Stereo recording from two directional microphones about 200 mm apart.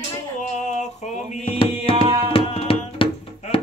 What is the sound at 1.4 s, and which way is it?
Music, 25° left (ahead or behind).